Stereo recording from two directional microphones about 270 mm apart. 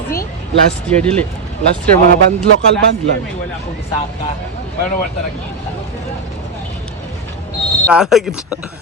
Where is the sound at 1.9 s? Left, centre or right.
Right.